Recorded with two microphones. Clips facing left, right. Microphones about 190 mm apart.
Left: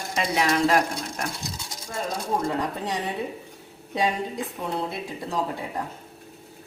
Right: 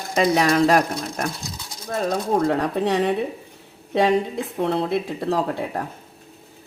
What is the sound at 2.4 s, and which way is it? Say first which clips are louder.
Speech: right 7 dB; 65° right (ahead or behind).